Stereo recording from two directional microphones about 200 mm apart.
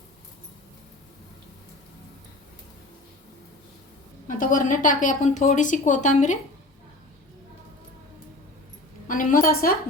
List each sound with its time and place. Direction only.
4.3 s a woman's voice: 40° left (ahead or behind)
9.0 s a woman's voice: 45° left (ahead or behind)